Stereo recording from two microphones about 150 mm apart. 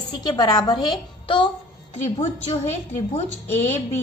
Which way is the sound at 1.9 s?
45° left (ahead or behind).